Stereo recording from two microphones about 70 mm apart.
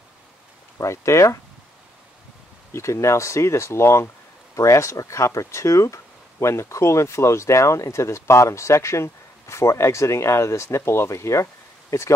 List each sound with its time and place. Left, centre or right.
0.7 s speech: left
2.7 s speech: left